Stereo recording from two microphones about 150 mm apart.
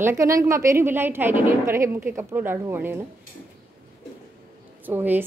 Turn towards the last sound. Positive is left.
turn(degrees=-10)  # may be behind; listen again after turning